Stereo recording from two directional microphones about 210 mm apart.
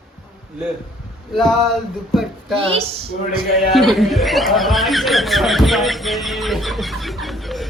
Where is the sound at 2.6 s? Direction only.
25° right (ahead or behind).